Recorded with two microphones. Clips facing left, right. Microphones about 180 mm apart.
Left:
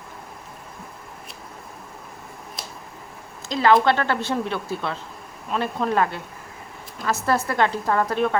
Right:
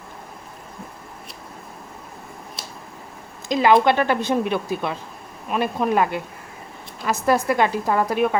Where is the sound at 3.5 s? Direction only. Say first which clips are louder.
Right 2 dB; 15° right (ahead or behind).